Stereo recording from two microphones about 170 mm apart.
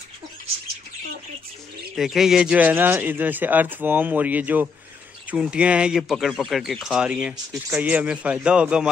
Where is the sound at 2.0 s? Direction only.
Centre (ahead or behind).